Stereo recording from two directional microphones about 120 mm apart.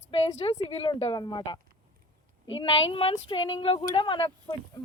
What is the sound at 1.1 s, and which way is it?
Speech, 40° left (ahead or behind).